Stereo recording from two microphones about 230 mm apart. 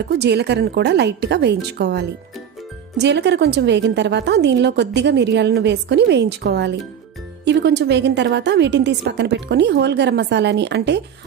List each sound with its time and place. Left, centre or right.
0.2 s a woman's voice: right